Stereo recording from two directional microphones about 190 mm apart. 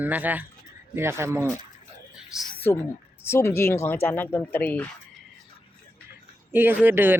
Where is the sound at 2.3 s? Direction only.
Centre (ahead or behind).